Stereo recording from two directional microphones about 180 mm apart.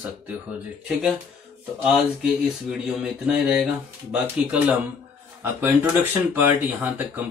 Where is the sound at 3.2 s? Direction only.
5° right (ahead or behind).